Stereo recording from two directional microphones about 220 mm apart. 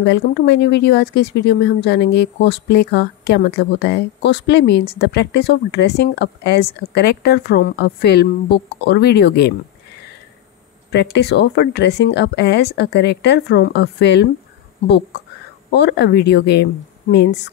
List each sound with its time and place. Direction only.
0.0 s speech: 50° left (ahead or behind)
10.9 s speech: 50° left (ahead or behind)
15.7 s speech: 50° left (ahead or behind)